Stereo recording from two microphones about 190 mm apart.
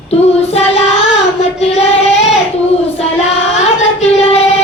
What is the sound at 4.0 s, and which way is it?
Child singing, 30° left (ahead or behind).